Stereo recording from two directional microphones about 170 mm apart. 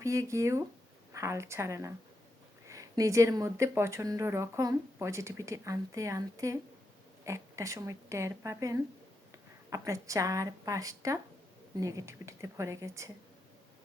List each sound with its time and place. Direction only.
0.0 s a woman's voice: 20° right (ahead or behind)